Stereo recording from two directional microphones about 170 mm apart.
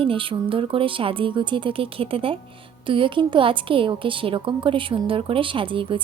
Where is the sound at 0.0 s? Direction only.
30° right (ahead or behind).